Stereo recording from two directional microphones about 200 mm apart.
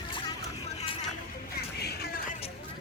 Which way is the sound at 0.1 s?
25° left (ahead or behind).